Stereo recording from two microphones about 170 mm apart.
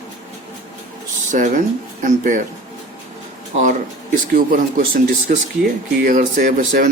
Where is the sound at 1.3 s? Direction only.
50° right (ahead or behind).